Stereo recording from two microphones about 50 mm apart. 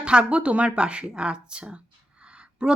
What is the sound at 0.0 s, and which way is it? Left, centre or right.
A woman's voice, centre.